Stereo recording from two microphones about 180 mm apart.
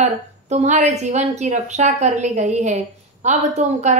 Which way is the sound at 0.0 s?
40° right (ahead or behind).